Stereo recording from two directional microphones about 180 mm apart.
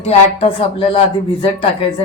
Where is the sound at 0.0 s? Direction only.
35° left (ahead or behind).